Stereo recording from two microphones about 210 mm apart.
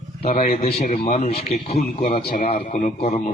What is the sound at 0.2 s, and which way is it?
A man's voice, 35° left (ahead or behind).